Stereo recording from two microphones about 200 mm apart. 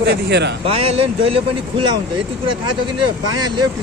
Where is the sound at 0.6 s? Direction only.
30° right (ahead or behind).